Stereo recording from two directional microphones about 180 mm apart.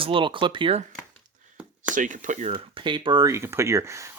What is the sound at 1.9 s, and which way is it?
Speech, 45° right (ahead or behind).